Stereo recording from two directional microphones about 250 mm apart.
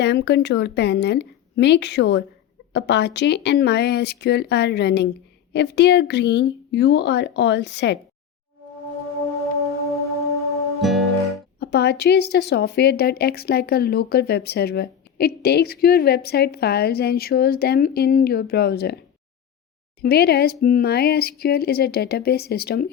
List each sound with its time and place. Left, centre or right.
0.0 s speech: left
10.8 s guitar: centre
11.6 s speech: left
20.0 s speech: left